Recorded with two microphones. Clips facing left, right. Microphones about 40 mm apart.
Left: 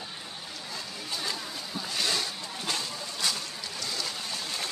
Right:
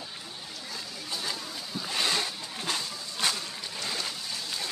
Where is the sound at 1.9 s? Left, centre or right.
Right.